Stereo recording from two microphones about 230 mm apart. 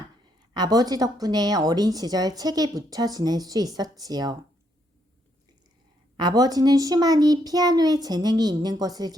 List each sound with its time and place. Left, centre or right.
0.5 s a woman's voice: centre
6.1 s a woman's voice: centre